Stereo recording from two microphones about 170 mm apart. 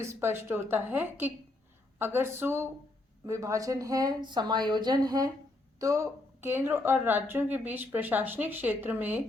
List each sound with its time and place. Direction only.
0.0 s a woman's voice: 15° right (ahead or behind)